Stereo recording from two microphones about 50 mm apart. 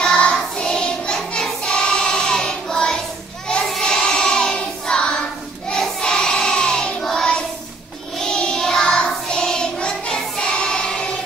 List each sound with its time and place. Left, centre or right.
0.0 s music: centre
0.7 s child singing: centre
3.4 s a sound: centre
3.7 s child singing: centre